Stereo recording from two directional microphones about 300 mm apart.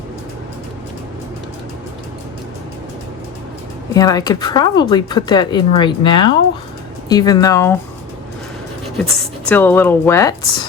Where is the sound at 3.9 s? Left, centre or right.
Centre.